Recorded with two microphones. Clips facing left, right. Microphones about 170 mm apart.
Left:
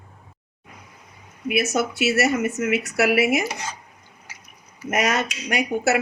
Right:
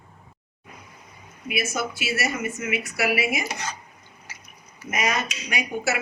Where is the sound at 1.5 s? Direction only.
65° left (ahead or behind).